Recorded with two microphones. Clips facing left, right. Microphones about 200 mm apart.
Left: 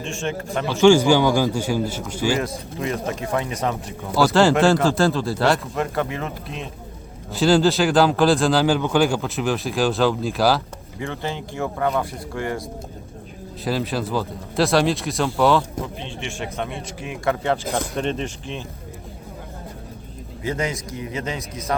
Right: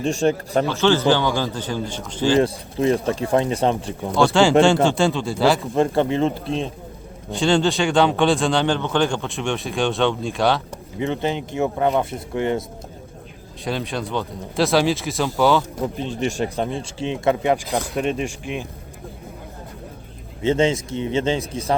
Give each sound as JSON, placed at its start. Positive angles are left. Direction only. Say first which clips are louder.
{"t": 0.0, "sound": "speech", "louder": "right 7 dB", "side_deg": -40}
{"t": 0.7, "sound": "a man's voice", "louder": "left 5 dB", "side_deg": 10}
{"t": 2.4, "sound": "speech", "louder": "right 7 dB", "side_deg": -30}
{"t": 4.1, "sound": "speech", "louder": "right 1 dB", "side_deg": 5}
{"t": 5.7, "sound": "speech", "louder": "right 6 dB", "side_deg": -30}
{"t": 7.3, "sound": "speech", "louder": "left 2 dB", "side_deg": 5}
{"t": 11.0, "sound": "speech", "louder": "right 5 dB", "side_deg": -20}
{"t": 13.7, "sound": "speech", "louder": "left 2 dB", "side_deg": 5}
{"t": 16.0, "sound": "speech", "louder": "right 8 dB", "side_deg": -40}
{"t": 17.9, "sound": "speech", "louder": "right 2 dB", "side_deg": -10}
{"t": 20.4, "sound": "speech", "louder": "right 7 dB", "side_deg": -25}